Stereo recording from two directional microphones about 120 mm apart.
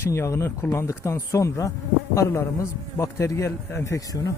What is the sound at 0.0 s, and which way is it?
A man's voice, 20° left (ahead or behind).